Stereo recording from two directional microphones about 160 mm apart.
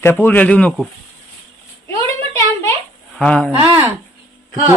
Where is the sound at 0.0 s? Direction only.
10° left (ahead or behind).